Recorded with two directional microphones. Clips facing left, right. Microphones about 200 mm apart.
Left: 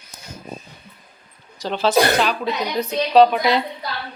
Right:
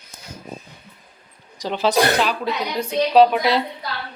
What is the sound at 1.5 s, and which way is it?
Speech, 15° right (ahead or behind).